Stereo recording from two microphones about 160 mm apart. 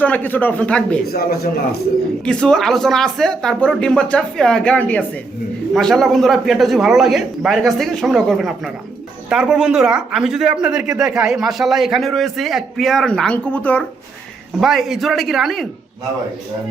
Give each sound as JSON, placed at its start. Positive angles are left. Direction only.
{"t": 0.0, "sound": "speech", "side_deg": 10}
{"t": 1.1, "sound": "speech", "side_deg": 75}
{"t": 2.2, "sound": "speech", "side_deg": 5}
{"t": 14.6, "sound": "speech", "side_deg": 0}